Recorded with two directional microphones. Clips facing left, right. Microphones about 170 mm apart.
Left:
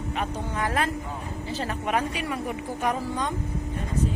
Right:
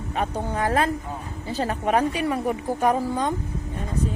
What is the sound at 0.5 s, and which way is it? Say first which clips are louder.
A woman's voice: right 4 dB; 35° right (ahead or behind).